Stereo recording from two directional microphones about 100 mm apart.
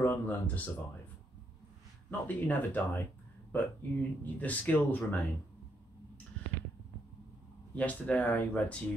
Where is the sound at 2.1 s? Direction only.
15° left (ahead or behind).